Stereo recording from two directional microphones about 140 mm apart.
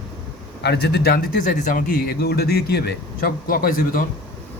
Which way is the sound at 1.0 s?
80° left.